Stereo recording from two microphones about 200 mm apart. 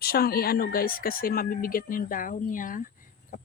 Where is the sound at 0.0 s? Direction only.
50° left (ahead or behind).